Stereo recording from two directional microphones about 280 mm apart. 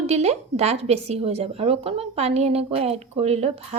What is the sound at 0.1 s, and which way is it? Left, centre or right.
A woman's voice, right.